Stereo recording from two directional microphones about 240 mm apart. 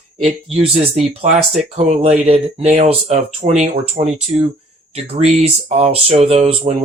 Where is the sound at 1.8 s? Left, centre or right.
Right.